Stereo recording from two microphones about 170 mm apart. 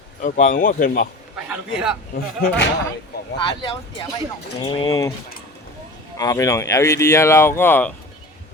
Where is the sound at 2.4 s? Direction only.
90° left.